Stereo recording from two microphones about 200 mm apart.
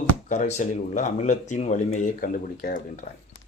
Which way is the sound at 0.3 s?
35° left (ahead or behind).